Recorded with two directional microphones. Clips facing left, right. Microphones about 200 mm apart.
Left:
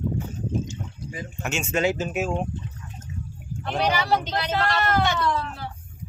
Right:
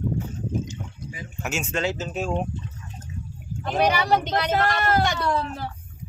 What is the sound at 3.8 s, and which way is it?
Speech, 50° right (ahead or behind).